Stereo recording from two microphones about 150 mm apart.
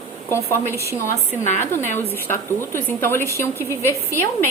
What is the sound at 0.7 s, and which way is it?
Speech, 20° right (ahead or behind).